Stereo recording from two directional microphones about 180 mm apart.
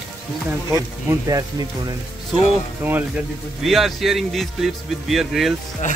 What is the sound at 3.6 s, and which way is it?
Speech, centre (ahead or behind).